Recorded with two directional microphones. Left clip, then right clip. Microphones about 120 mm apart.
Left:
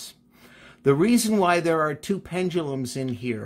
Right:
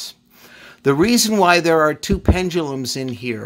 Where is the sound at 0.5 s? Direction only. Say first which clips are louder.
Right 3 dB; 30° right (ahead or behind).